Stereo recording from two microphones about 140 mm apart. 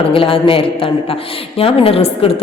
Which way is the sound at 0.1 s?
40° left (ahead or behind).